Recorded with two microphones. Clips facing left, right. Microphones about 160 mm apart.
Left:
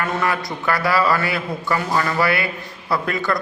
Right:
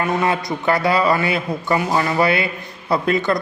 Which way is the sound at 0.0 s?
20° right (ahead or behind).